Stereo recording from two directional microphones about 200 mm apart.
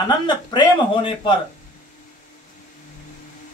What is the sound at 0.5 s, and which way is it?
Speech, 25° left (ahead or behind).